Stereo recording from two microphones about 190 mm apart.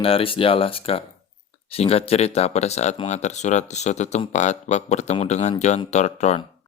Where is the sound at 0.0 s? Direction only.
30° left (ahead or behind).